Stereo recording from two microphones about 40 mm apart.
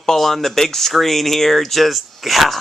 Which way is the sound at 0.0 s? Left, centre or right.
Centre.